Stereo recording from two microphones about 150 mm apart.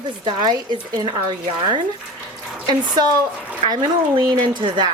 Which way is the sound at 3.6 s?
30° right (ahead or behind).